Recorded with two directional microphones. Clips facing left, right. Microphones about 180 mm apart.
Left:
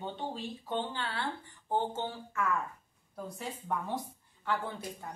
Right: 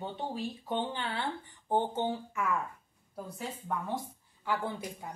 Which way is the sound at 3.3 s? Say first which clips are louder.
Even; centre (ahead or behind).